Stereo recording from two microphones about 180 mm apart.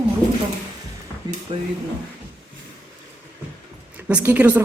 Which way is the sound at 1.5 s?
30° right (ahead or behind).